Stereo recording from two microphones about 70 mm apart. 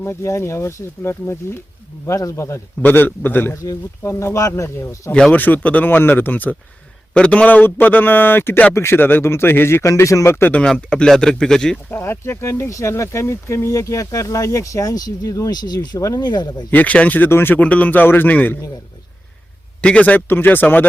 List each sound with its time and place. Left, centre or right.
0.0 s speech: left
2.0 s speech: left
2.8 s speech: left
3.6 s speech: left
4.1 s speech: left
4.4 s speech: left
5.3 s speech: left
9.0 s speech: left
10.6 s speech: centre
11.9 s speech: left
16.2 s speech: left
16.7 s speech: left
19.8 s speech: centre